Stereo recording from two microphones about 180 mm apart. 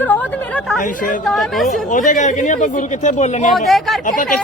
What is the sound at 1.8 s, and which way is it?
Speech, 45° left (ahead or behind).